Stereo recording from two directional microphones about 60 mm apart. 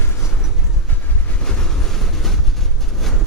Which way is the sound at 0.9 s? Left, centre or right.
Left.